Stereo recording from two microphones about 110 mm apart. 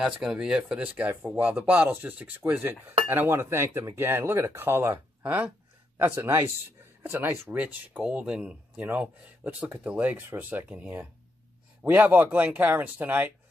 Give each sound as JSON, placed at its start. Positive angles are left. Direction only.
{"t": 0.0, "sound": "speech", "side_deg": -5}